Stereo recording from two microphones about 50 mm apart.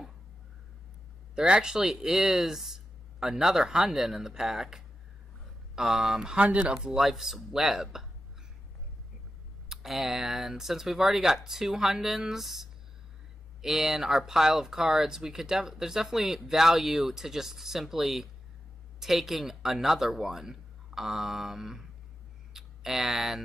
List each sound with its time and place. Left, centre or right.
1.3 s speech: centre
6.4 s speech: right
7.0 s speech: centre
9.7 s speech: centre
22.5 s a sound: centre